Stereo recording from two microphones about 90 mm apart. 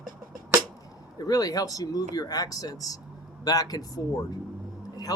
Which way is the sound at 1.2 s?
45° left (ahead or behind).